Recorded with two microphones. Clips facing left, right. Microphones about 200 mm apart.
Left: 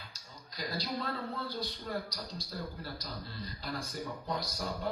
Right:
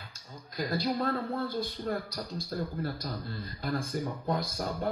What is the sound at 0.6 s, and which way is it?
Speech, 50° right (ahead or behind).